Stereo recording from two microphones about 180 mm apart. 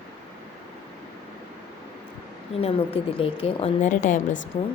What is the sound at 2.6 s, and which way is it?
A woman's voice, 35° left (ahead or behind).